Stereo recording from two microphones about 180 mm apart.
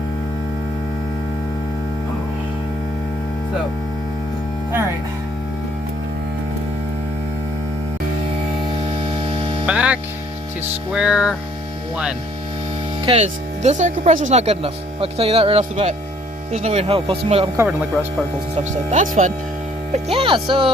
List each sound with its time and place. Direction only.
9.6 s mains hum: 5° right (ahead or behind)
10.9 s music: 5° right (ahead or behind)
13.1 s speech: 35° right (ahead or behind)
18.5 s speech: 40° right (ahead or behind)
20.1 s speech: 30° right (ahead or behind)